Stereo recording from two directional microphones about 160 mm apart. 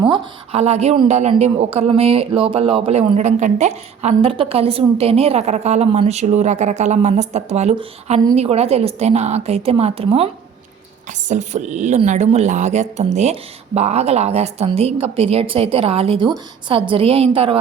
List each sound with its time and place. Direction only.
0.0 s speech: 35° right (ahead or behind)
11.3 s speech: 50° right (ahead or behind)